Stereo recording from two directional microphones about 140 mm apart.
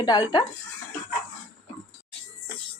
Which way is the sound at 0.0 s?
30° left (ahead or behind).